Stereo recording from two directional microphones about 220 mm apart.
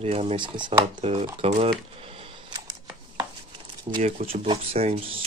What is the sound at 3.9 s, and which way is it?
Speech, 25° right (ahead or behind).